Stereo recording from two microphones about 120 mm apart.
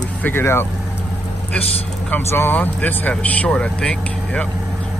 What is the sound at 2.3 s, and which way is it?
Speech, 15° left (ahead or behind).